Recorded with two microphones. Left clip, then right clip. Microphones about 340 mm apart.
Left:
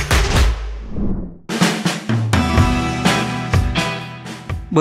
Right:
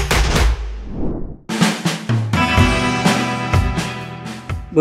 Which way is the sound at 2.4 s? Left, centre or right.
Centre.